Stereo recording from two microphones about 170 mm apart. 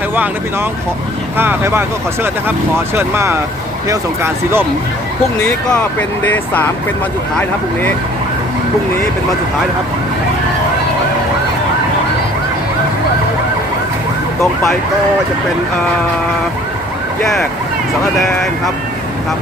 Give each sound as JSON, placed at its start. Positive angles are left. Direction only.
{"t": 1.4, "sound": "speech", "side_deg": -15}
{"t": 2.9, "sound": "speech", "side_deg": -15}
{"t": 5.4, "sound": "speech", "side_deg": 10}
{"t": 18.2, "sound": "speech", "side_deg": 0}